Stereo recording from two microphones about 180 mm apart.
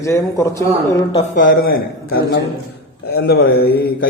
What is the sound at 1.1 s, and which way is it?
A man's voice, 45° left (ahead or behind).